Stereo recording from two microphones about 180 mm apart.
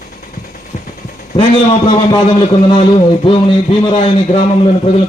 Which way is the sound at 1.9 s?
30° left (ahead or behind).